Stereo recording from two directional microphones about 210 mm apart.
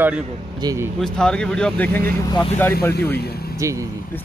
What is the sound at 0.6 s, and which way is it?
Speech, 15° right (ahead or behind).